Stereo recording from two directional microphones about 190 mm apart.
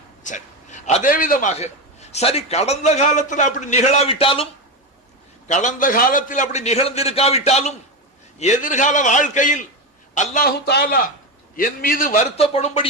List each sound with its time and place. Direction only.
0.3 s a man's voice: 40° left (ahead or behind)
5.5 s a man's voice: 40° left (ahead or behind)